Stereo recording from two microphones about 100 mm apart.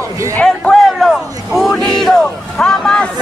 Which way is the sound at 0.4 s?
5° left (ahead or behind).